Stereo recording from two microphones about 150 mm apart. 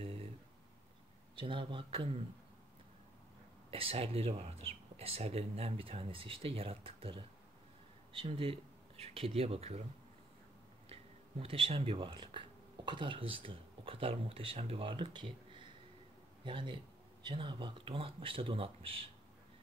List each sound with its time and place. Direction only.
0.0 s a sound: 40° right (ahead or behind)
1.3 s speech: 35° right (ahead or behind)
3.7 s speech: 40° right (ahead or behind)
10.9 s speech: 40° right (ahead or behind)